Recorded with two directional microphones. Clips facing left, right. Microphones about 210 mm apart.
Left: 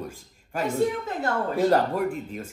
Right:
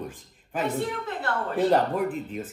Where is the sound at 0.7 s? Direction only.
45° left (ahead or behind).